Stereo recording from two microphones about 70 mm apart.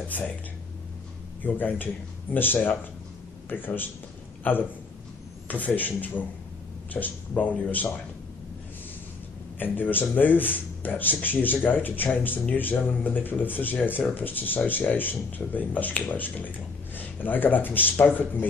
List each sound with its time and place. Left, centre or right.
1.4 s speech: left
5.8 s speech: left
9.6 s speech: left